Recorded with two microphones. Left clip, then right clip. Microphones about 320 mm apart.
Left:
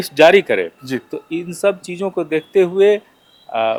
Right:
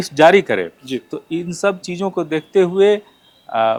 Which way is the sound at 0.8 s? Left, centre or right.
Left.